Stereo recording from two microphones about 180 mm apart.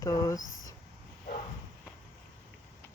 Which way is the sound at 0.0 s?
20° left (ahead or behind).